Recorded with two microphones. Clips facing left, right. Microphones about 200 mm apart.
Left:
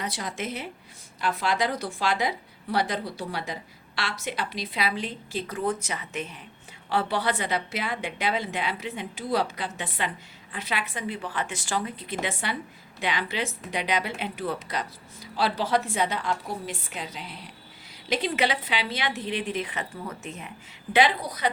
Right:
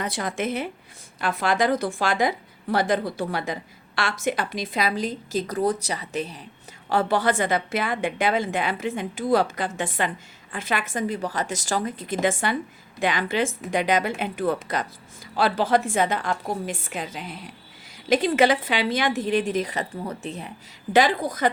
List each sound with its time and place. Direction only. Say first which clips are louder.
0.0 s a woman's voice: right 5 dB; 50° right (ahead or behind); by 6.4 s 35° right (ahead or behind)
6.9 s a woman's voice: right 5 dB; 45° right (ahead or behind)
20.9 s a woman's voice: right 3 dB; 45° right (ahead or behind)